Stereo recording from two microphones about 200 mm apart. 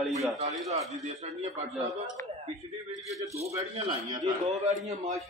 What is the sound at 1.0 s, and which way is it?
Speech, 35° right (ahead or behind).